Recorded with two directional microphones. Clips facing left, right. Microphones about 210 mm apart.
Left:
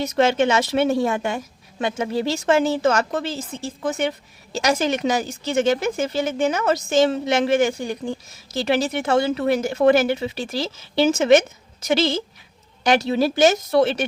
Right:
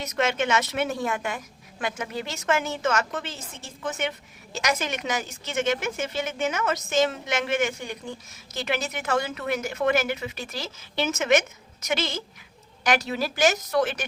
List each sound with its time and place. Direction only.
0.0 s speech: 30° left (ahead or behind)